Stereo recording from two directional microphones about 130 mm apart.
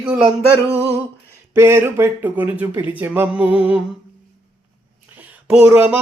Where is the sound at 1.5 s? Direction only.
20° right (ahead or behind).